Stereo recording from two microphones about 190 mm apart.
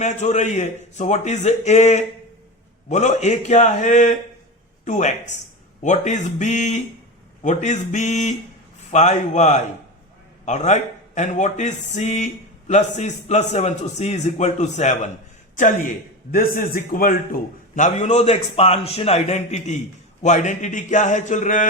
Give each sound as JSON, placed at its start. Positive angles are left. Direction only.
{"t": 0.0, "sound": "a man's voice", "side_deg": 40}
{"t": 16.3, "sound": "a man's voice", "side_deg": 45}